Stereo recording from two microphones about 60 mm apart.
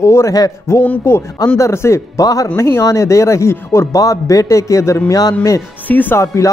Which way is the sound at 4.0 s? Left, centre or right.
Left.